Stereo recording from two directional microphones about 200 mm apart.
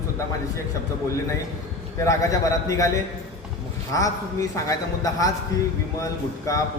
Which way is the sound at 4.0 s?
15° left (ahead or behind).